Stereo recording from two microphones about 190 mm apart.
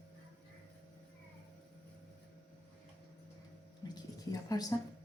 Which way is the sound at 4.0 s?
20° left (ahead or behind).